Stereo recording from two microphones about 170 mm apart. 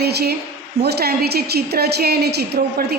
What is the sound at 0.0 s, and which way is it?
A woman's voice, 70° right (ahead or behind).